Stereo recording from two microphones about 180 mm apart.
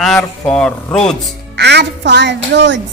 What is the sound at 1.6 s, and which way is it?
Speech, 70° right (ahead or behind).